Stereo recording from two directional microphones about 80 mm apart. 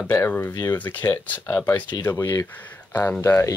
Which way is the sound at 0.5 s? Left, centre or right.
Left.